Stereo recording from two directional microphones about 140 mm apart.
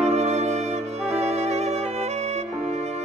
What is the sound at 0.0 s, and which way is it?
Music, 50° right (ahead or behind).